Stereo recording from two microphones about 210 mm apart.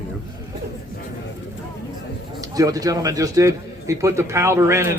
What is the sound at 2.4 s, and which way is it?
A man's voice, 15° right (ahead or behind).